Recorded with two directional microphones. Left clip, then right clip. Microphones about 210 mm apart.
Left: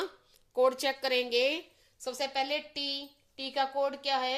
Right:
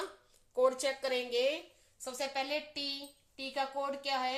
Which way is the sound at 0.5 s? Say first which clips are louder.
Left 3 dB; 35° left (ahead or behind).